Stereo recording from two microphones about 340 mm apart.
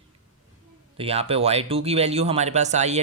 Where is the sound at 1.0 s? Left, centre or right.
Centre.